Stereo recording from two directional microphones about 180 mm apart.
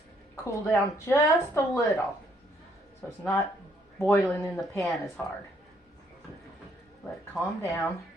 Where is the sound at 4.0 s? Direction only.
15° left (ahead or behind).